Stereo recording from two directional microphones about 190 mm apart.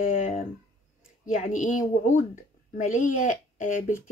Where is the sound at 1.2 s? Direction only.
40° left (ahead or behind).